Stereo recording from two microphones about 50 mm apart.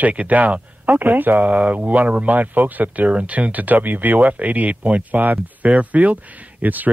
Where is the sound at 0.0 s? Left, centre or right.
Right.